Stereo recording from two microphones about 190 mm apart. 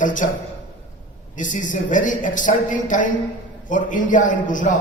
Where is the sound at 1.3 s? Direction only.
40° left (ahead or behind).